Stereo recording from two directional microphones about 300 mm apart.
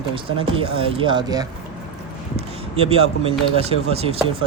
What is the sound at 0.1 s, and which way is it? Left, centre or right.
Speech, centre.